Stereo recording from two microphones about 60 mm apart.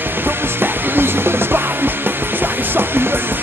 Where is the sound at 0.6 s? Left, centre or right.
Right.